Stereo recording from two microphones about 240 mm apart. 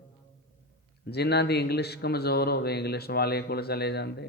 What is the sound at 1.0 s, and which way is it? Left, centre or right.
A man's voice, left.